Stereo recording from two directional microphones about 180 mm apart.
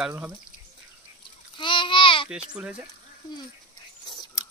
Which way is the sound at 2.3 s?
5° right (ahead or behind).